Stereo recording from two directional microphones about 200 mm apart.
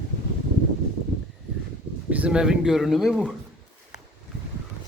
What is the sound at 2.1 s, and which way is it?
Speech, 5° right (ahead or behind).